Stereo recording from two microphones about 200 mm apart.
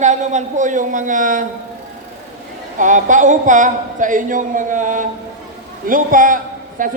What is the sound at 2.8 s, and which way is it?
A man's voice, 40° right (ahead or behind).